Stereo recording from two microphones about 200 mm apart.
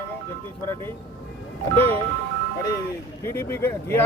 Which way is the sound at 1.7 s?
10° left (ahead or behind).